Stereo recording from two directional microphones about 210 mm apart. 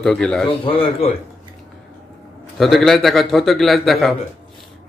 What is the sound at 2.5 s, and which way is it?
A man's voice, centre (ahead or behind).